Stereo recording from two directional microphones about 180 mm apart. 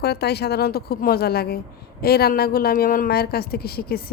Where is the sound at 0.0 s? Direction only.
65° left (ahead or behind).